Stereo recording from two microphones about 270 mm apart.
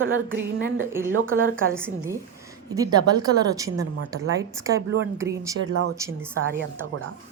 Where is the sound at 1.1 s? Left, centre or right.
Right.